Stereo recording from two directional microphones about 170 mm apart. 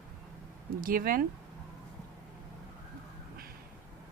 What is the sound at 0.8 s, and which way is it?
Speech, 55° right (ahead or behind).